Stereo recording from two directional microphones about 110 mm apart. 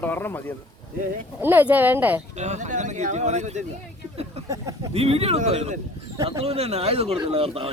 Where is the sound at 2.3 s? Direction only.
90° right.